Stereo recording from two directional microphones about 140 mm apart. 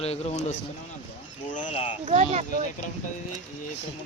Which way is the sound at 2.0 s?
50° right (ahead or behind).